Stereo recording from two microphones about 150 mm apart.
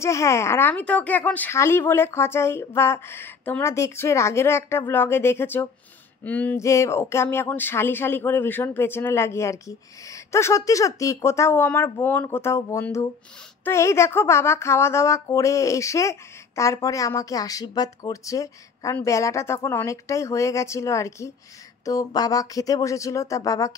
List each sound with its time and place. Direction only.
0.0 s speech: 20° left (ahead or behind)